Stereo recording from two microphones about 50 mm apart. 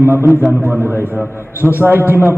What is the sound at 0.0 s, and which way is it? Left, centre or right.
Speech, right.